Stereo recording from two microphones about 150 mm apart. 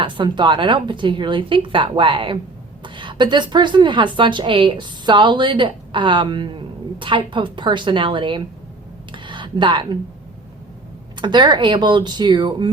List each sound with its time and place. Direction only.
0.0 s a woman's voice: 30° right (ahead or behind)
9.1 s a sound: 30° right (ahead or behind)
11.2 s a woman's voice: 30° right (ahead or behind)